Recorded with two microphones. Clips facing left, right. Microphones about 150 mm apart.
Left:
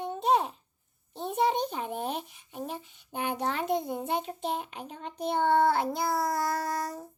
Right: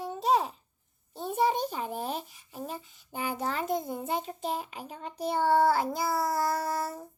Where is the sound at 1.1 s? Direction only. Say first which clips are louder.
Even; centre (ahead or behind).